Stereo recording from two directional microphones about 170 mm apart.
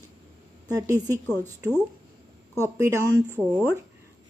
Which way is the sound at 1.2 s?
10° left (ahead or behind).